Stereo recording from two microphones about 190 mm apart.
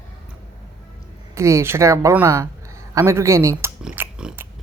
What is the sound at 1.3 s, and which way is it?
Speech, 15° right (ahead or behind).